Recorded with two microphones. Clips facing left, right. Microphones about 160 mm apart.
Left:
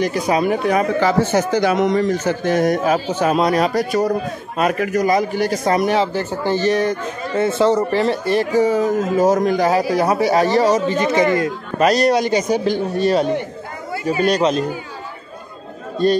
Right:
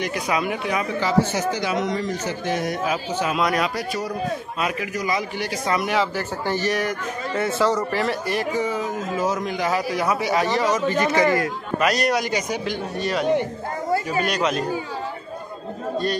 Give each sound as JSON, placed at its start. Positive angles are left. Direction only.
{"t": 0.0, "sound": "a man's voice", "side_deg": 35}
{"t": 8.5, "sound": "a man's voice", "side_deg": 40}
{"t": 10.9, "sound": "a man's voice", "side_deg": 20}